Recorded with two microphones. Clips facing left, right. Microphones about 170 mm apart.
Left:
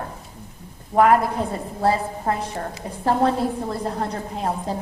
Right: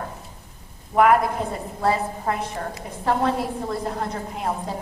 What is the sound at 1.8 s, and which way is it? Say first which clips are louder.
A woman's voice: left 1 dB; 35° left (ahead or behind).